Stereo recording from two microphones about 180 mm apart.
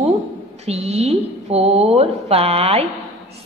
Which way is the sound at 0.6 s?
35° right (ahead or behind).